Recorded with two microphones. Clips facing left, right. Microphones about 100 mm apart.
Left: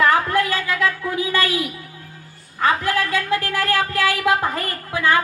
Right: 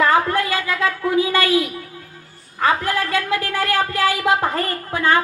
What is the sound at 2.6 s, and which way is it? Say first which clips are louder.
A woman's voice: even; 20° right (ahead or behind).